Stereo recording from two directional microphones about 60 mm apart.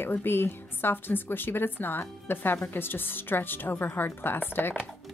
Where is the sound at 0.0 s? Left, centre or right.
Left.